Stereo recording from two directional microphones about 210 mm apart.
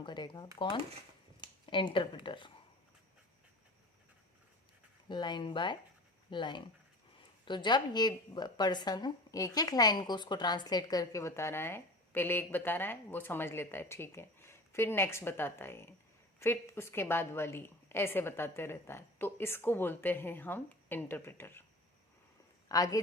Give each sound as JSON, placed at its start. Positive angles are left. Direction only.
{"t": 0.0, "sound": "speech", "side_deg": 20}
{"t": 5.0, "sound": "a woman's voice", "side_deg": 20}
{"t": 22.7, "sound": "a woman's voice", "side_deg": 15}